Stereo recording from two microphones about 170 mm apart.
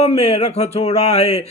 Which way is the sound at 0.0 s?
40° left (ahead or behind).